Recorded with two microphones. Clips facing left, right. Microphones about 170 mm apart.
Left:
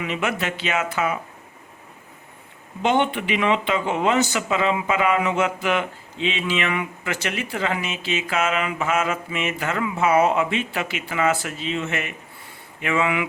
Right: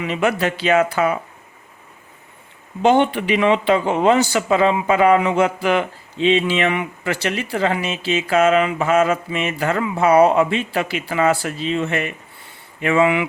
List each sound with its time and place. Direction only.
0.0 s speech: 35° right (ahead or behind)
2.8 s speech: 35° right (ahead or behind)